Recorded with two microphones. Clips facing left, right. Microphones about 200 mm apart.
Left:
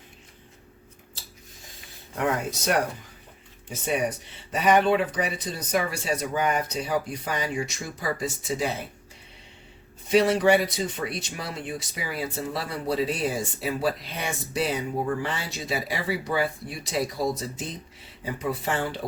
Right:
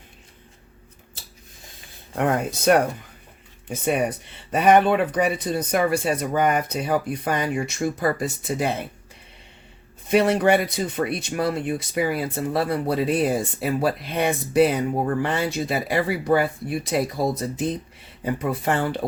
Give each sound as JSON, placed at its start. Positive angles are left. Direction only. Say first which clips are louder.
{"t": 2.1, "sound": "speech", "louder": "right 4 dB", "side_deg": -55}
{"t": 10.1, "sound": "speech", "louder": "right 2 dB", "side_deg": -55}